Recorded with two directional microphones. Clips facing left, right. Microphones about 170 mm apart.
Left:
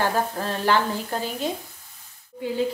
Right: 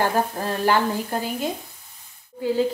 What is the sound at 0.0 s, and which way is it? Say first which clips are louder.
Speech: right 2 dB; 10° right (ahead or behind).